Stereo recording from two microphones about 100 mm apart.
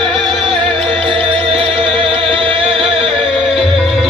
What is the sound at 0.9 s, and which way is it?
Music, 60° right (ahead or behind).